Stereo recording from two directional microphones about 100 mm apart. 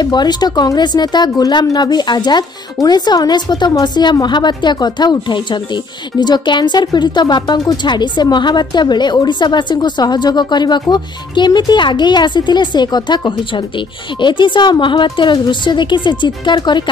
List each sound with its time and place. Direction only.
0.0 s speech: 45° left (ahead or behind)